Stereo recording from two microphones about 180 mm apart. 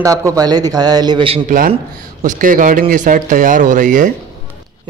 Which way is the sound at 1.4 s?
50° right (ahead or behind).